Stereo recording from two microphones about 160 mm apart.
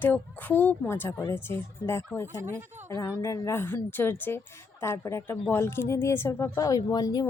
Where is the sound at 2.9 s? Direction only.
20° left (ahead or behind).